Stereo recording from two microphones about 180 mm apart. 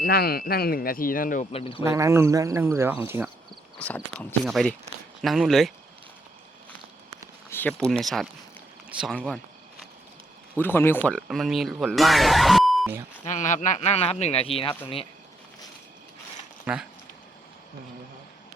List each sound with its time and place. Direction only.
0.0 s speech: 60° left (ahead or behind)
1.5 s speech: 30° left (ahead or behind)
1.8 s speech: 15° right (ahead or behind)
3.8 s speech: 10° left (ahead or behind)
7.5 s a sound: 10° left (ahead or behind)
7.9 s speech: centre (ahead or behind)
10.6 s speech: 10° left (ahead or behind)
13.2 s speech: 45° left (ahead or behind)
16.7 s speech: 10° right (ahead or behind)